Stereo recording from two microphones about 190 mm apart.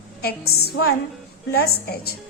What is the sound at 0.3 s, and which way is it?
A woman's voice, 55° left (ahead or behind).